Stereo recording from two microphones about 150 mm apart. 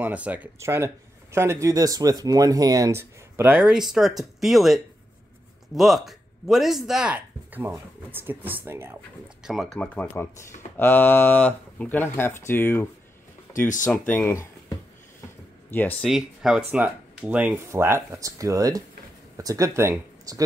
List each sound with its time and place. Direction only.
0.0 s speech: 10° right (ahead or behind)
9.4 s speech: centre (ahead or behind); by 12.8 s 15° left (ahead or behind)
13.5 s speech: 60° left (ahead or behind)
13.8 s speech: 15° left (ahead or behind)
15.7 s speech: 10° left (ahead or behind)
16.1 s speech: 5° right (ahead or behind); by 20.4 s 20° right (ahead or behind)